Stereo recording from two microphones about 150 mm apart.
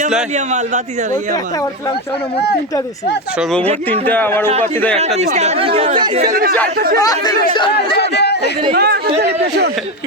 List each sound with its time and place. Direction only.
0.3 s speech: 50° right (ahead or behind)
4.0 s speech: 10° left (ahead or behind)
4.9 s speech: 45° right (ahead or behind)
6.3 s speech: 75° right (ahead or behind)
6.7 s speech: 90° right
7.0 s speech: 25° left (ahead or behind)
7.9 s a sound: 90° left
8.7 s speech: 90° right